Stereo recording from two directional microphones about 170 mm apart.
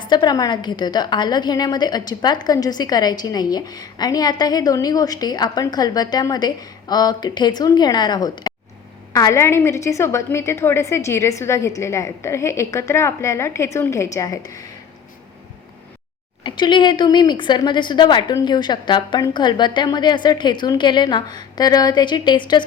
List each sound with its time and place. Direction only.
0.0 s a woman's voice: 25° left (ahead or behind)
16.4 s a woman's voice: 25° left (ahead or behind)